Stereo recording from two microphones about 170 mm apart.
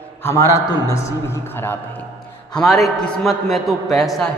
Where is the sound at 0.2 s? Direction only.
15° left (ahead or behind).